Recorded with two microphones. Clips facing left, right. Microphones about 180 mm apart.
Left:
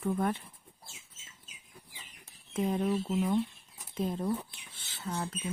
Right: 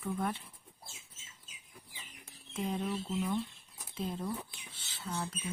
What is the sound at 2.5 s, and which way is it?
Speech, 50° left (ahead or behind).